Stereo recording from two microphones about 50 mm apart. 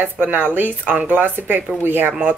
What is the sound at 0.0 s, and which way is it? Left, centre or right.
Speech, right.